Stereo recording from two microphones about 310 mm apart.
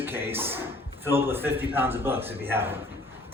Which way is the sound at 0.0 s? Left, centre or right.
Centre.